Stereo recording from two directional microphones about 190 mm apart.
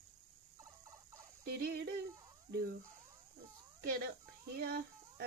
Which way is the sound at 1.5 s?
55° right (ahead or behind).